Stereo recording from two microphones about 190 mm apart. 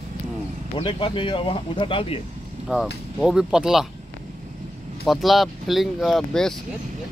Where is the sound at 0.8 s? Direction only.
25° left (ahead or behind).